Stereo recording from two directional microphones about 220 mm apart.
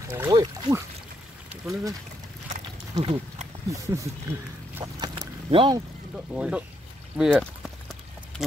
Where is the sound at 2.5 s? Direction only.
30° right (ahead or behind).